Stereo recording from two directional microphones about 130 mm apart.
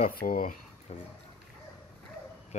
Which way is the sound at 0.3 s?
90° left.